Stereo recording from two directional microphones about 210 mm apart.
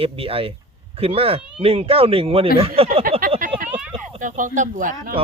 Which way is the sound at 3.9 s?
35° right (ahead or behind).